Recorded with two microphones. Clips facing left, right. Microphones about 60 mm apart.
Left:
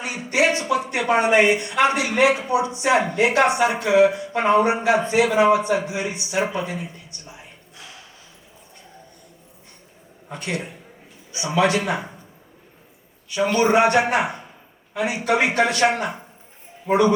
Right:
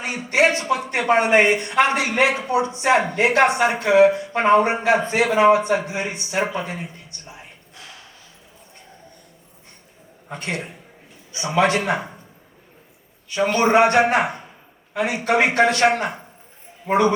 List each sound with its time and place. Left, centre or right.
0.0 s a sound: right
0.9 s a man's voice: right
10.2 s a man's voice: right
13.3 s a man's voice: right